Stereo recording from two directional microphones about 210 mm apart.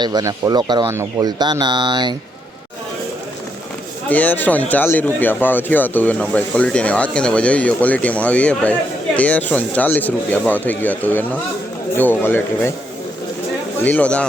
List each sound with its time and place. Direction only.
0.0 s speech: 20° right (ahead or behind)
4.1 s speech: 5° left (ahead or behind)
13.8 s speech: 5° left (ahead or behind)